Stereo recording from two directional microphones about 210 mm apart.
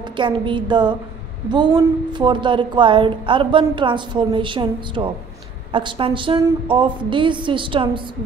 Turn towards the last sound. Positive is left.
turn(degrees=-25)  # may be behind; listen again after turning